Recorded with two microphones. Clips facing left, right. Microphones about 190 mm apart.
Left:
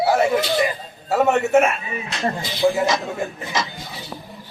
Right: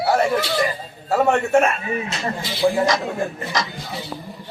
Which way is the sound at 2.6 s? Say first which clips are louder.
Even; 5° left (ahead or behind).